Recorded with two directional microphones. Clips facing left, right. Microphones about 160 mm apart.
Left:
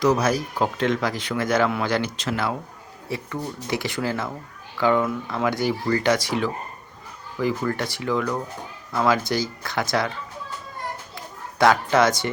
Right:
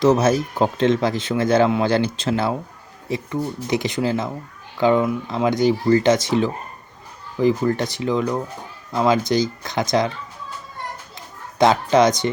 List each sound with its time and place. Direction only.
0.0 s speech: 25° right (ahead or behind)
11.5 s speech: 20° right (ahead or behind)